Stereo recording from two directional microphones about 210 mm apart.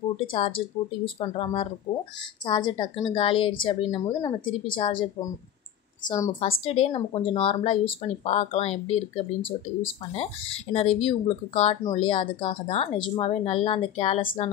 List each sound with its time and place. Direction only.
0.2 s speech: 25° left (ahead or behind)
6.0 s a woman's voice: 15° left (ahead or behind)
6.4 s speech: 30° left (ahead or behind)